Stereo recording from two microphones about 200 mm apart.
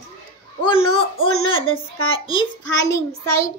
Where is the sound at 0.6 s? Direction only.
25° left (ahead or behind).